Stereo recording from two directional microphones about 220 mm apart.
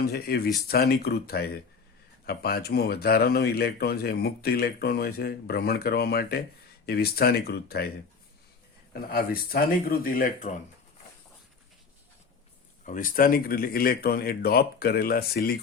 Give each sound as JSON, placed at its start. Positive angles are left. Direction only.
{"t": 0.0, "sound": "speech", "side_deg": 45}
{"t": 8.9, "sound": "speech", "side_deg": 45}
{"t": 12.8, "sound": "speech", "side_deg": 35}